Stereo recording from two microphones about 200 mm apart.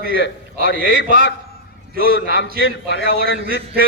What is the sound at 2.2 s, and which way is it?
A man's voice, 60° left (ahead or behind).